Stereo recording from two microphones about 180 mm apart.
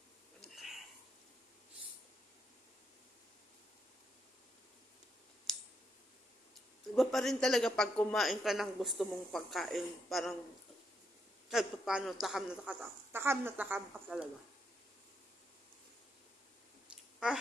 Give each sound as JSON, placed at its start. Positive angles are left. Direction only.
{"t": 0.4, "sound": "a sound", "side_deg": 0}
{"t": 5.5, "sound": "clicking", "side_deg": 0}
{"t": 7.0, "sound": "a man's voice", "side_deg": 0}
{"t": 11.4, "sound": "a man's voice", "side_deg": -5}